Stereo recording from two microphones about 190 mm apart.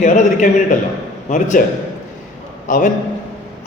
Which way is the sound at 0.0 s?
40° left (ahead or behind).